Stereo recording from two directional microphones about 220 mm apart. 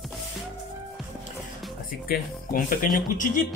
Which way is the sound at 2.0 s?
40° left (ahead or behind).